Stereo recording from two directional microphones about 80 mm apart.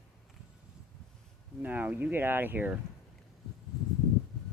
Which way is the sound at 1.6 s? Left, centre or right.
Right.